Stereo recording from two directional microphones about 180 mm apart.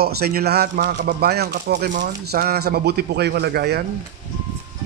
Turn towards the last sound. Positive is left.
turn(degrees=-65)  # may be behind; listen again after turning